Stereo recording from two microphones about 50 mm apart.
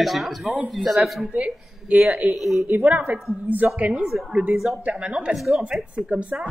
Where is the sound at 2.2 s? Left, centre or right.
Centre.